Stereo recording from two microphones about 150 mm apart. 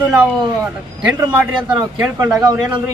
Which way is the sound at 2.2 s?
25° right (ahead or behind).